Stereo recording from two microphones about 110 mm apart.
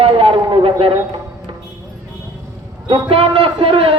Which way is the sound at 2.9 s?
55° right (ahead or behind).